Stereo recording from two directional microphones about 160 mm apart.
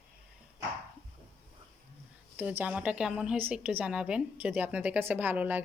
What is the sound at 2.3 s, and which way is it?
A woman's voice, 10° right (ahead or behind).